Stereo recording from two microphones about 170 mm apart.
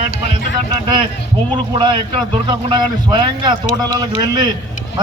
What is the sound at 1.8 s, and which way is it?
A man's voice, 30° right (ahead or behind).